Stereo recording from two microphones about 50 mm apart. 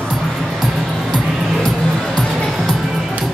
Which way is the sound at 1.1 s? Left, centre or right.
Centre.